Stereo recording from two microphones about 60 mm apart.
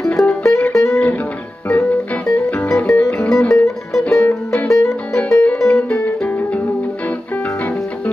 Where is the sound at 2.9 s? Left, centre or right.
Centre.